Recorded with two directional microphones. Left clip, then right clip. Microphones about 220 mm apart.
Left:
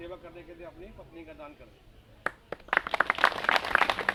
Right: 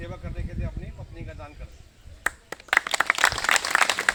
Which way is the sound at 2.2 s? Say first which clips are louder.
Right 6 dB; 45° right (ahead or behind).